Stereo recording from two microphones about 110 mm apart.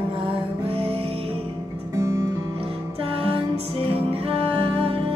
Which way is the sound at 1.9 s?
25° right (ahead or behind).